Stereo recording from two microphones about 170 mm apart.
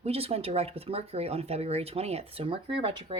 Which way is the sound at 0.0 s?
35° right (ahead or behind).